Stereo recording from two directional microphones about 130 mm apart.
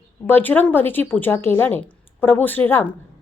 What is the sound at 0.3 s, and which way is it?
A woman's voice, 15° left (ahead or behind).